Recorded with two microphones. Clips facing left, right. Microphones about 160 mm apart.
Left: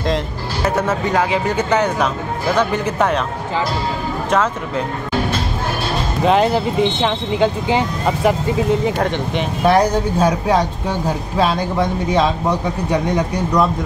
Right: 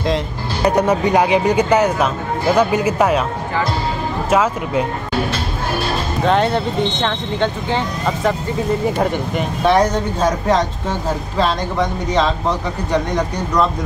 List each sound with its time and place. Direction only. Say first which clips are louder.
0.7 s speech: right 4 dB; 15° right (ahead or behind)
4.3 s speech: right 2 dB; 10° right (ahead or behind)
6.2 s a man's voice: left 2 dB; 5° left (ahead or behind)
8.9 s speech: right 1 dB; 10° right (ahead or behind)
9.8 s a man's voice: left 1 dB; 10° left (ahead or behind)